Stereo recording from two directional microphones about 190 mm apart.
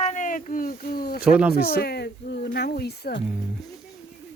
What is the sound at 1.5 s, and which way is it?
Speech, 55° left (ahead or behind).